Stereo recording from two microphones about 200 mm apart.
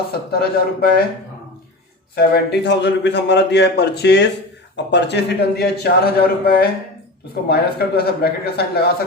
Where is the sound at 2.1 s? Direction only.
55° left (ahead or behind).